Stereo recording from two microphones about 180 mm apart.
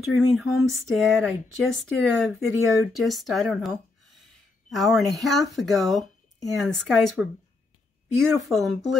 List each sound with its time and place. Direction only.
0.0 s speech: centre (ahead or behind)
2.5 s speech: 15° right (ahead or behind)
2.9 s speech: centre (ahead or behind)
8.4 s speech: centre (ahead or behind)